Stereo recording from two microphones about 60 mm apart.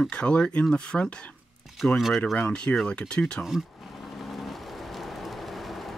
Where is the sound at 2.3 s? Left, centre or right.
Centre.